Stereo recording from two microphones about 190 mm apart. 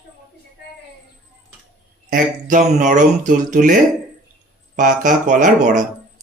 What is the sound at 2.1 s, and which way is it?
Speech, 40° right (ahead or behind).